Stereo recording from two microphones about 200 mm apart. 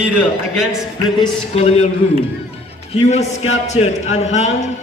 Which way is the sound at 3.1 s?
35° left (ahead or behind).